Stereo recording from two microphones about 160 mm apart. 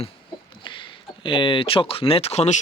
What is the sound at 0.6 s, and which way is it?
Speech, 30° left (ahead or behind).